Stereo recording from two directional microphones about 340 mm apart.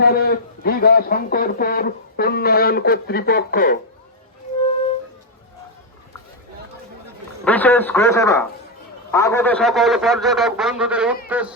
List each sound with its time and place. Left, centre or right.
0.0 s a man's voice: left
7.4 s a man's voice: centre